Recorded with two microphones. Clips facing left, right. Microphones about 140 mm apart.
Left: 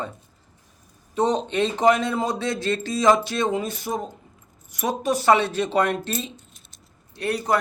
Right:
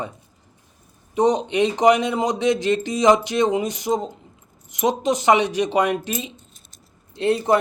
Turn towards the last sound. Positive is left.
turn(degrees=-25)  # may be behind; listen again after turning